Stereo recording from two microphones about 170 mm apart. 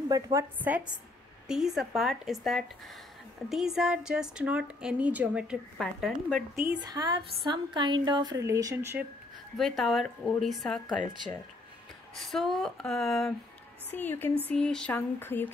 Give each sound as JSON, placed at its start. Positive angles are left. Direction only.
{"t": 0.1, "sound": "a woman's voice", "side_deg": -15}
{"t": 6.5, "sound": "speech", "side_deg": -15}
{"t": 9.6, "sound": "a woman's voice", "side_deg": 0}
{"t": 13.8, "sound": "a sound", "side_deg": 10}